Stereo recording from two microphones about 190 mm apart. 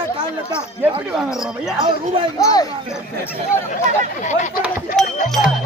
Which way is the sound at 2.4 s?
20° left (ahead or behind).